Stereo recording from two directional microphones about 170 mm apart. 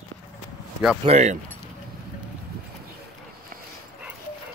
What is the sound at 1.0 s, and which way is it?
Speech, 40° right (ahead or behind).